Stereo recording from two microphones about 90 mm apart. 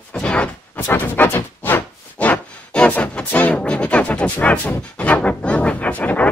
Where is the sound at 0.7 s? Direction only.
20° left (ahead or behind).